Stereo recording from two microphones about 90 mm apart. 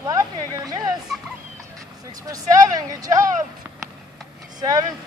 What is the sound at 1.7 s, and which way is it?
Speech, 45° right (ahead or behind).